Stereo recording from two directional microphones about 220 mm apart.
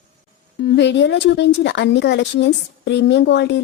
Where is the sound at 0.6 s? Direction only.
50° left (ahead or behind).